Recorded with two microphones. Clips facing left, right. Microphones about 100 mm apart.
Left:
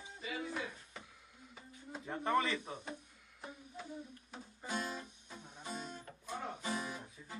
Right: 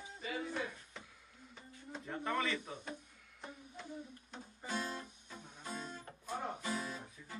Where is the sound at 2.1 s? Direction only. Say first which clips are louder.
Left 3 dB; 30° left (ahead or behind).